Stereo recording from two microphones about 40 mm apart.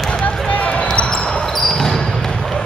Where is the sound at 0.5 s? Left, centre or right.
Left.